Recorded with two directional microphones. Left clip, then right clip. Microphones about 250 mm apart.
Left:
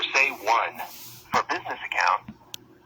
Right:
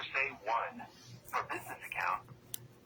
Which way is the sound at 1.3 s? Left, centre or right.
Left.